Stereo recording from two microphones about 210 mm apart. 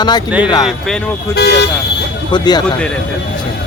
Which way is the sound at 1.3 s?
55° left (ahead or behind).